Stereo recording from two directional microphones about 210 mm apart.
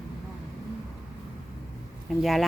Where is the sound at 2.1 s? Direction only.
Centre (ahead or behind).